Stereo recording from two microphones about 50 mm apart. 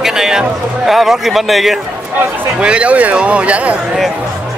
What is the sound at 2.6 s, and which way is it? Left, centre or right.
Speech, right.